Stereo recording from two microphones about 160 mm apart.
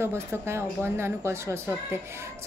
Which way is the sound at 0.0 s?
15° right (ahead or behind).